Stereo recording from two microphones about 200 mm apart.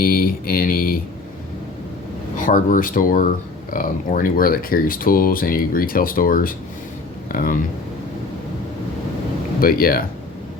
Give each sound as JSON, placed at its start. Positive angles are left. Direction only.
{"t": 0.0, "sound": "speech", "side_deg": 45}
{"t": 2.3, "sound": "speech", "side_deg": 40}
{"t": 9.6, "sound": "speech", "side_deg": 45}